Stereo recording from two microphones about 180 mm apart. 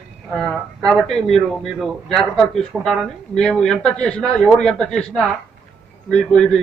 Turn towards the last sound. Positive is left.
turn(degrees=5)  # may be behind; listen again after turning